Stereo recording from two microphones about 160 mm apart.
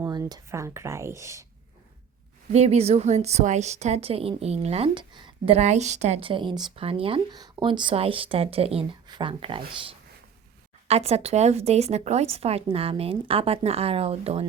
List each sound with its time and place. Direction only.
0.0 s speech: 20° right (ahead or behind)
2.5 s speech: 40° right (ahead or behind)
5.5 s speech: 45° right (ahead or behind)